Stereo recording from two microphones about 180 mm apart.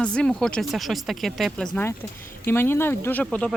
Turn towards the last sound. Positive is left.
turn(degrees=5)  # may be behind; listen again after turning